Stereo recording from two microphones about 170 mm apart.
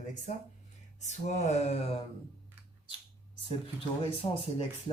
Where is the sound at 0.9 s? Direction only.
45° left (ahead or behind).